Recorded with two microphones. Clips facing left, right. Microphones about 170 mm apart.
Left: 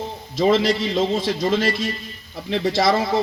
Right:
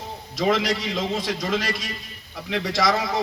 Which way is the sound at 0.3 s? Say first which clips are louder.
Left 5 dB; 30° left (ahead or behind).